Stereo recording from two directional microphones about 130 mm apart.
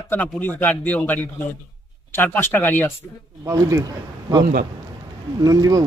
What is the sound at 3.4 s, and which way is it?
Speech, 25° right (ahead or behind).